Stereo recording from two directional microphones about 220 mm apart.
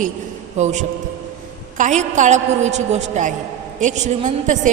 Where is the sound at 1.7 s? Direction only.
35° right (ahead or behind).